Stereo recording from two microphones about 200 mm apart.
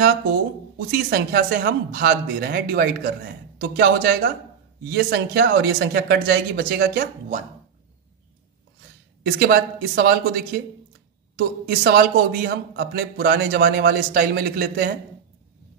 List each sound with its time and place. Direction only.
0.7 s speech: 50° right (ahead or behind)
9.2 s speech: 55° right (ahead or behind)